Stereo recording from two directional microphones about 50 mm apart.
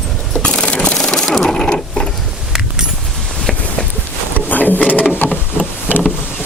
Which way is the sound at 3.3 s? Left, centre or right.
Centre.